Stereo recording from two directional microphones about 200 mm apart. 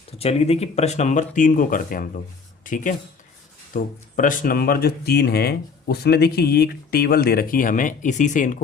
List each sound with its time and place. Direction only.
0.2 s speech: 30° left (ahead or behind)